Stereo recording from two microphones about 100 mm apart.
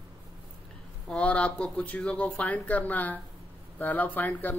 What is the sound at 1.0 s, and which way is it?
Speech, 10° left (ahead or behind).